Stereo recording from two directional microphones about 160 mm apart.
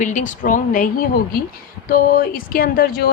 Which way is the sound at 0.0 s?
50° left (ahead or behind).